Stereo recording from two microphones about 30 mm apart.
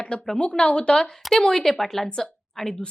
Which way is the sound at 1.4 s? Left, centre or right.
Centre.